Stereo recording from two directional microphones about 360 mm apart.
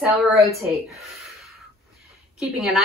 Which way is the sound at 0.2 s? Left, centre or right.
Centre.